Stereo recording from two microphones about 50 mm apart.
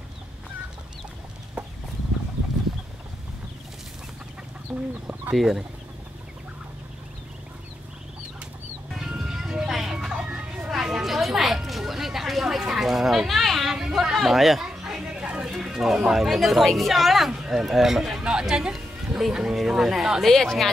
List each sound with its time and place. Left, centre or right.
4.7 s speech: right
5.3 s speech: centre
8.9 s music: centre
10.2 s vehicle: right
10.7 s a sound: centre
13.7 s a sound: centre
16.1 s speech: centre